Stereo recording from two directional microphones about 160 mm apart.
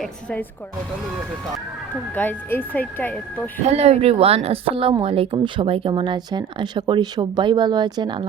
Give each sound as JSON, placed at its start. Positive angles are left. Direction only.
{"t": 0.0, "sound": "speech", "side_deg": 5}
{"t": 2.1, "sound": "speech", "side_deg": 10}
{"t": 3.6, "sound": "speech", "side_deg": -40}